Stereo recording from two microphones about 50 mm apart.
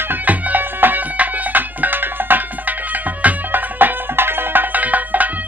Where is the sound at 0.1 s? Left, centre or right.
Right.